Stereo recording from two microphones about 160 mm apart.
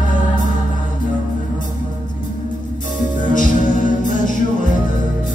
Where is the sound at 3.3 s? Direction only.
55° left (ahead or behind).